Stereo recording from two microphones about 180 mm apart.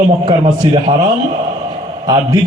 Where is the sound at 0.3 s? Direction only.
25° right (ahead or behind).